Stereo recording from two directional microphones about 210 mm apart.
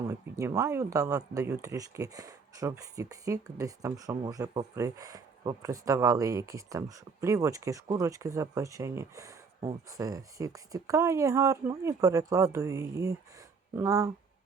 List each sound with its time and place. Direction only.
0.1 s speech: 15° right (ahead or behind)